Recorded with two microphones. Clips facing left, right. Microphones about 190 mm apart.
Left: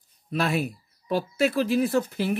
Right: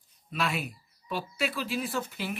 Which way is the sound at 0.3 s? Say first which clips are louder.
Left 6 dB; 40° left (ahead or behind).